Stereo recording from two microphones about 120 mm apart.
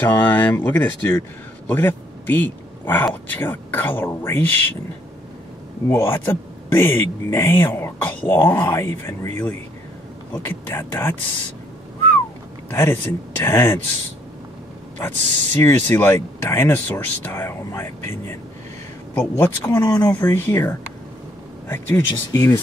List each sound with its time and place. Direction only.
0.0 s a man's voice: 15° left (ahead or behind)
5.9 s speech: 20° left (ahead or behind)
12.6 s speech: 20° left (ahead or behind)
15.0 s speech: 20° left (ahead or behind)